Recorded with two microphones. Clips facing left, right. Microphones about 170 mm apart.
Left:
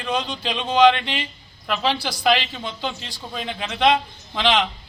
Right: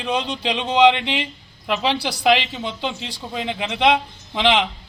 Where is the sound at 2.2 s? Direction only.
15° right (ahead or behind).